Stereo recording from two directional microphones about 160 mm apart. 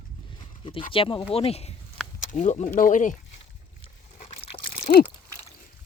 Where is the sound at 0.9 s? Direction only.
35° left (ahead or behind); by 3.1 s 55° left (ahead or behind).